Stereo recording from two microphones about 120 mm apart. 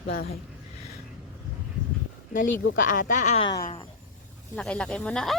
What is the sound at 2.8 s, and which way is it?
Speech, 90° left.